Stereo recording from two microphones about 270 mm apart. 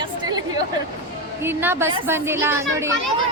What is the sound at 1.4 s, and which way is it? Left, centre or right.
A woman's voice, centre.